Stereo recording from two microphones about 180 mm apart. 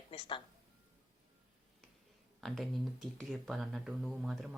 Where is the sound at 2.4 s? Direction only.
Centre (ahead or behind).